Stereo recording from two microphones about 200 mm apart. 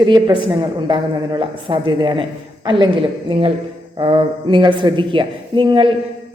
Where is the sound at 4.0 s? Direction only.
25° right (ahead or behind).